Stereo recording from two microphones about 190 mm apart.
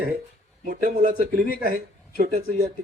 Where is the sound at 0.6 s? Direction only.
45° right (ahead or behind).